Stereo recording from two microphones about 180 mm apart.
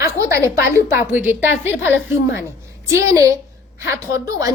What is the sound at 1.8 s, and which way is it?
Speech, 90° left.